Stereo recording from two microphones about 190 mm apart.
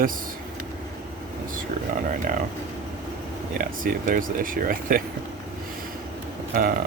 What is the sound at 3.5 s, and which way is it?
Speech, 45° right (ahead or behind).